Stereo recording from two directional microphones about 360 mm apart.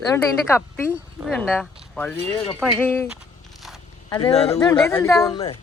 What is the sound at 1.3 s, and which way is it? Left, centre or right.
Speech, centre.